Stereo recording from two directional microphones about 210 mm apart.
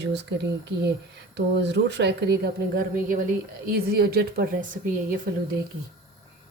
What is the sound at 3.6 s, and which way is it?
Speech, 50° right (ahead or behind).